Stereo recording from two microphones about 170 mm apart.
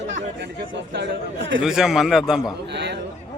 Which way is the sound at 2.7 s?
90° right.